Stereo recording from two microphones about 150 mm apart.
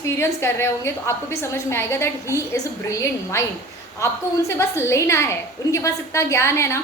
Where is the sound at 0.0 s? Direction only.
20° left (ahead or behind).